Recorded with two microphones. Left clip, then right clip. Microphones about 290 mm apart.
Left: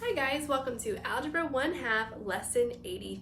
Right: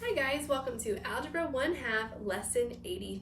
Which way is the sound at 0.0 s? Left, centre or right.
Centre.